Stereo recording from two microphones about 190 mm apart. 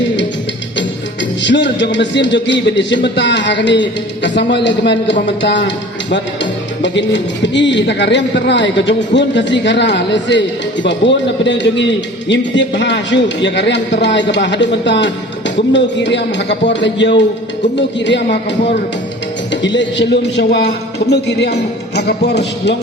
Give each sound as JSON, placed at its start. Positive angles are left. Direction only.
{"t": 0.8, "sound": "music", "side_deg": 70}
{"t": 4.2, "sound": "a man's voice", "side_deg": 70}